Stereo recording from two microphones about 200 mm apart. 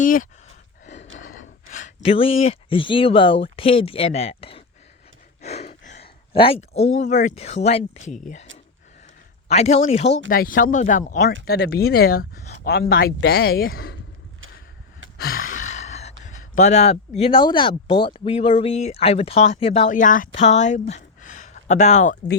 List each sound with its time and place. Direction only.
0.0 s a sound: 40° left (ahead or behind)
1.2 s speech: 40° left (ahead or behind)
5.4 s a sound: 35° left (ahead or behind)
7.0 s speech: 35° left (ahead or behind)
9.5 s speech: 30° left (ahead or behind)
10.2 s speech: 45° left (ahead or behind)
11.4 s speech: 55° left (ahead or behind)
15.2 s speech: 45° left (ahead or behind)